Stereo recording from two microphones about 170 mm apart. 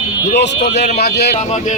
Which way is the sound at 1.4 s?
40° left (ahead or behind).